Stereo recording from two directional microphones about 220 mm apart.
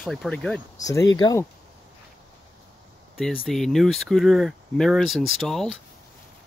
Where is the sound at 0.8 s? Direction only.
15° left (ahead or behind).